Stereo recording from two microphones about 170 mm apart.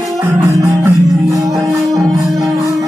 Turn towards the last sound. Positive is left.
turn(degrees=-15)  # may be behind; listen again after turning